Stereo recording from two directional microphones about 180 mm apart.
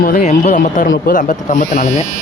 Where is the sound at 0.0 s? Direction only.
50° left (ahead or behind).